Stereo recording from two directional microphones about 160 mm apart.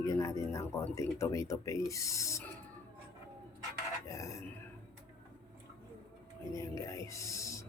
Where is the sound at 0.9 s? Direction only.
20° left (ahead or behind).